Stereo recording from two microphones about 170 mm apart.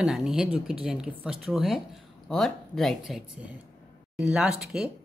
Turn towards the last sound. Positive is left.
turn(degrees=0)  # may be behind; listen again after turning